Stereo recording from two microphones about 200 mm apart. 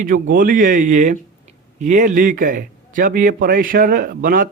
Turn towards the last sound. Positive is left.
turn(degrees=-45)  # may be behind; listen again after turning